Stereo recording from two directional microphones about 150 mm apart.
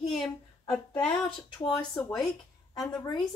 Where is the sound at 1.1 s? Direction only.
30° left (ahead or behind).